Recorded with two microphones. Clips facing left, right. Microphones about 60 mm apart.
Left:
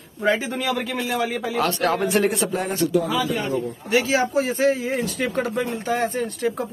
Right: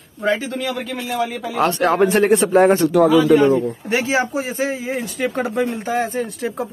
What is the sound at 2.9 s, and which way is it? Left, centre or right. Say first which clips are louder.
Speech: right 10 dB; right.